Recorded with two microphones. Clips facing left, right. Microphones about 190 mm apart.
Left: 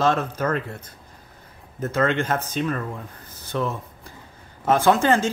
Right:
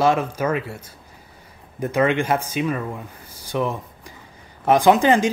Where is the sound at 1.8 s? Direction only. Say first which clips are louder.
Right 3 dB; 15° right (ahead or behind).